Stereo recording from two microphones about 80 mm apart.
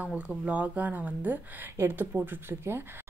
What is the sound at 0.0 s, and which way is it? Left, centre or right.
A woman's voice, centre.